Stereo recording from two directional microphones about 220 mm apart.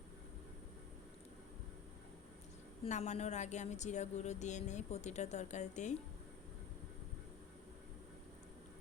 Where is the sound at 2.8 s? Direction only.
30° left (ahead or behind).